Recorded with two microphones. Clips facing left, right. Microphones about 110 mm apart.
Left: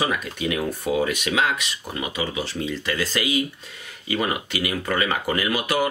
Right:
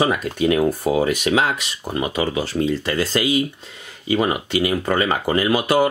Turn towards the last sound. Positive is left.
turn(degrees=-30)  # may be behind; listen again after turning